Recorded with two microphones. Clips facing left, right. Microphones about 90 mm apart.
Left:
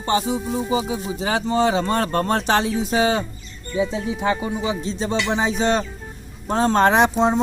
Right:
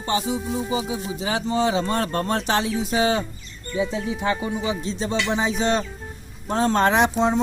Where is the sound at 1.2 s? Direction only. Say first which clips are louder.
Left 3 dB; 45° left (ahead or behind).